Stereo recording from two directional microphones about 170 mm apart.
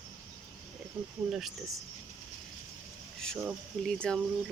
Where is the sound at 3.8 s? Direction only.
5° left (ahead or behind).